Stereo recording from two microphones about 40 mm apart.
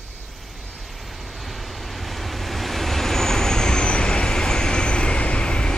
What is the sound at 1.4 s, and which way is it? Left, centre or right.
Vehicle, centre.